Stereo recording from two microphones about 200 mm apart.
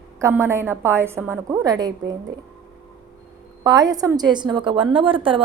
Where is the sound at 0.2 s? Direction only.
10° right (ahead or behind).